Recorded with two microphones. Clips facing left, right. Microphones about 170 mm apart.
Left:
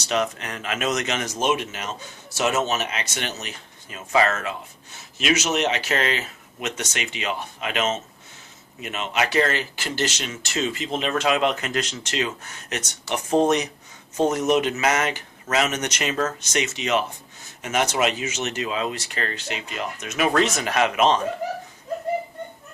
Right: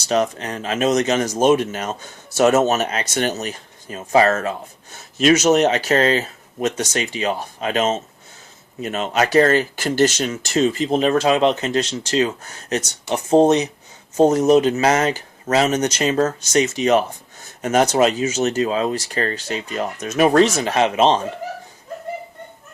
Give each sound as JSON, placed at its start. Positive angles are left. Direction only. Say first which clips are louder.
{"t": 0.1, "sound": "speech", "louder": "right 5 dB", "side_deg": -35}